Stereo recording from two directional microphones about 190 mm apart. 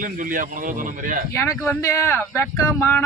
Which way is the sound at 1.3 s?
15° left (ahead or behind).